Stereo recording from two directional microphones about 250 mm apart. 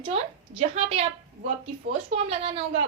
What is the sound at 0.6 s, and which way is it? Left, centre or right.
A woman's voice, right.